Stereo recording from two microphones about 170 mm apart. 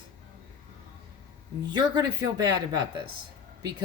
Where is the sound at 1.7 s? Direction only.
25° right (ahead or behind).